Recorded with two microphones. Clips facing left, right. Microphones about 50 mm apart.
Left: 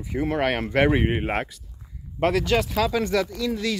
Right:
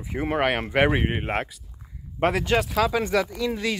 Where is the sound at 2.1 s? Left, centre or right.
Centre.